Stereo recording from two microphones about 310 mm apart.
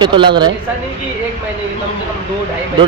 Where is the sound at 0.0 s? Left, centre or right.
Centre.